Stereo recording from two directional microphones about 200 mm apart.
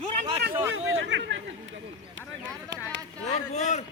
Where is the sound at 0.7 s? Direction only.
70° right (ahead or behind).